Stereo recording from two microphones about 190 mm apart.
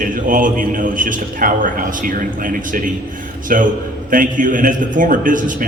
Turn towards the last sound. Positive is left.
turn(degrees=-45)  # may be behind; listen again after turning